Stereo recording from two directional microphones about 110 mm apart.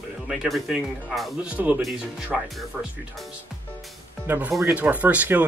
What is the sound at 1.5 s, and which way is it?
Speech, 15° right (ahead or behind).